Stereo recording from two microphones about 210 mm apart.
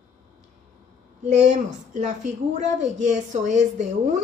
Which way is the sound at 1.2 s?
35° right (ahead or behind).